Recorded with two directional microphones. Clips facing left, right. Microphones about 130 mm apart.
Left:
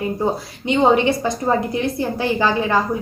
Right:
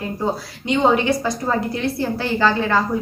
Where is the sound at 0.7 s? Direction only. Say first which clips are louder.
Left 2 dB; 20° left (ahead or behind).